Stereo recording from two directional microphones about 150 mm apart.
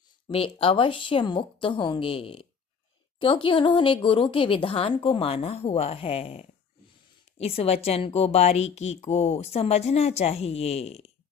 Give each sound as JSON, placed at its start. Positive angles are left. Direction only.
{"t": 0.3, "sound": "a woman's voice", "side_deg": 35}